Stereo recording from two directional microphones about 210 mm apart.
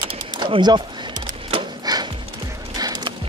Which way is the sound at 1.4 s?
25° right (ahead or behind).